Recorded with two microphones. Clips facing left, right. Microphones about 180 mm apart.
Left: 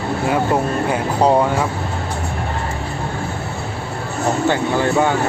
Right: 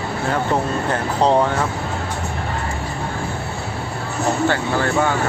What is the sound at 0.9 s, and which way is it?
Speech, 10° left (ahead or behind).